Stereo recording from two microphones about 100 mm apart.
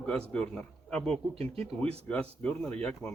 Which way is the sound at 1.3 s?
90° right.